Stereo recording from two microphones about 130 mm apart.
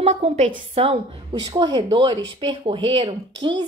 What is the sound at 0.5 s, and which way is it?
Speech, 50° right (ahead or behind).